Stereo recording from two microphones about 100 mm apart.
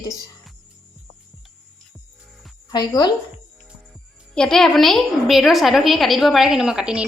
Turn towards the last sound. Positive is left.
turn(degrees=-10)  # may be behind; listen again after turning